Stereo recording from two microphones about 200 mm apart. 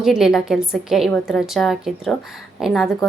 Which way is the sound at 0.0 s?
Centre (ahead or behind).